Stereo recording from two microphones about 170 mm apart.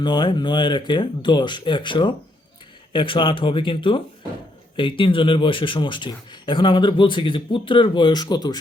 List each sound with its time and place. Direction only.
0.0 s speech: 25° left (ahead or behind)